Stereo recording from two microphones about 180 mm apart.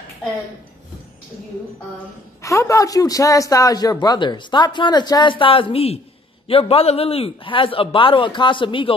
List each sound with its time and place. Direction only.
2.4 s a man's voice: 15° left (ahead or behind)